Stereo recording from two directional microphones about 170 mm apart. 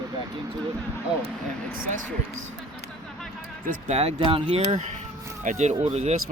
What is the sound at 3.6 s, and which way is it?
Speech, 45° right (ahead or behind).